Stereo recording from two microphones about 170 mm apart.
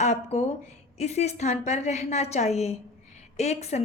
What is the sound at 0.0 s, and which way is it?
A woman's voice, 40° left (ahead or behind).